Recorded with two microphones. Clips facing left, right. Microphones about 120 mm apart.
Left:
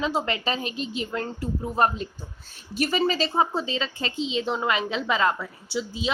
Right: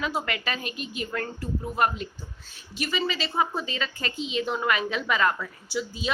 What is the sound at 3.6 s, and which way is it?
A woman's voice, 25° left (ahead or behind).